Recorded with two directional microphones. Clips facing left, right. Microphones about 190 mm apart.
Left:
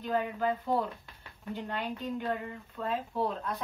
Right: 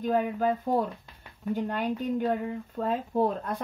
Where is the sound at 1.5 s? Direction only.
45° right (ahead or behind).